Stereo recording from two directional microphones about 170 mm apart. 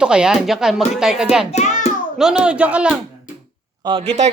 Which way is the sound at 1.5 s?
45° left (ahead or behind).